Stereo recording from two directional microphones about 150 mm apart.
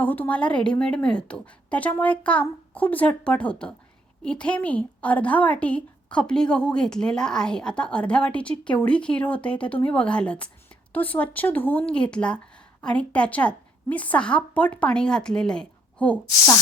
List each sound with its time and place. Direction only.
0.0 s a woman's voice: 10° left (ahead or behind)